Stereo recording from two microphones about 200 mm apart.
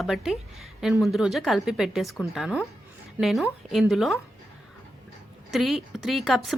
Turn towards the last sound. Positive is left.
turn(degrees=0)  # may be behind; listen again after turning